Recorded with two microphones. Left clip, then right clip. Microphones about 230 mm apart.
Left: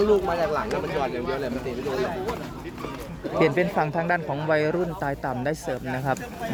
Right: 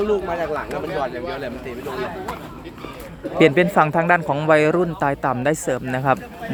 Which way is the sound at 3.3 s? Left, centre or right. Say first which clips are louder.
Right 7 dB; right.